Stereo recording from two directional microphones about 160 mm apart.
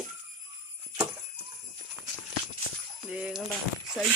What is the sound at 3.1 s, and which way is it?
Speech, 10° right (ahead or behind).